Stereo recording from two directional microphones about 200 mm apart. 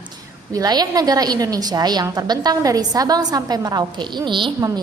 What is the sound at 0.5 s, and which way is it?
A woman's voice, 20° right (ahead or behind).